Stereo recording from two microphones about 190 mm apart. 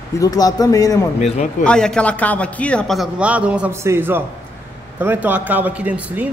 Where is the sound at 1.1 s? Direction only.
35° left (ahead or behind).